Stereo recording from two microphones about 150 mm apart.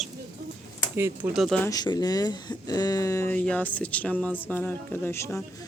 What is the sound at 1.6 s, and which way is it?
Speech, 25° left (ahead or behind).